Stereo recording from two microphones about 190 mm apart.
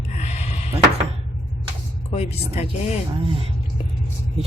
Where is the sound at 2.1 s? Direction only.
35° left (ahead or behind).